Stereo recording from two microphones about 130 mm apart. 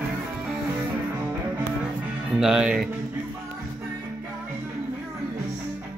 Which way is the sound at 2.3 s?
5° right (ahead or behind).